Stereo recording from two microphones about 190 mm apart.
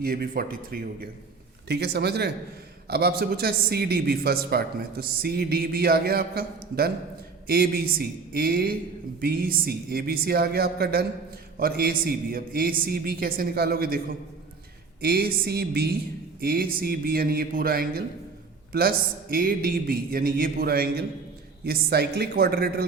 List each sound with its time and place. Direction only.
0.0 s a man's voice: 50° right (ahead or behind)
1.6 s a man's voice: 60° right (ahead or behind)
15.0 s a man's voice: 55° right (ahead or behind)